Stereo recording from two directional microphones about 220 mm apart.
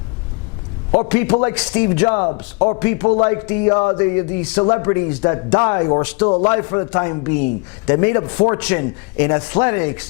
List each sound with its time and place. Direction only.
0.9 s a man's voice: 15° left (ahead or behind)
2.7 s a man's voice: 15° left (ahead or behind)